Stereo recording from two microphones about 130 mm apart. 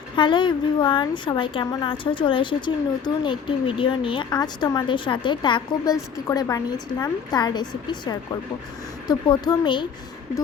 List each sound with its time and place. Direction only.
0.2 s a woman's voice: 35° left (ahead or behind)